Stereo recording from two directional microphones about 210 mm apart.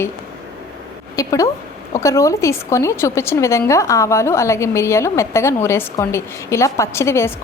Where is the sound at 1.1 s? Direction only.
15° left (ahead or behind).